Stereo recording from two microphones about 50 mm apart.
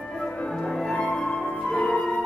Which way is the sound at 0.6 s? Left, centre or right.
Centre.